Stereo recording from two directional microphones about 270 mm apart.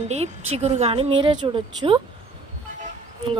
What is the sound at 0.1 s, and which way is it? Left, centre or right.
A woman's voice, right.